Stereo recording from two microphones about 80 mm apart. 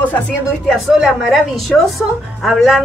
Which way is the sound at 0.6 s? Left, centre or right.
Centre.